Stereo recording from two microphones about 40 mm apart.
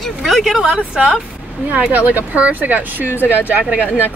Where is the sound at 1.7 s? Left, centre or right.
Right.